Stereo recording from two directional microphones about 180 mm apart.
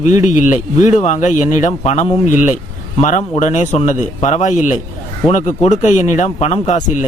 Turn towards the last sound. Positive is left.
turn(degrees=45)  # may be behind; listen again after turning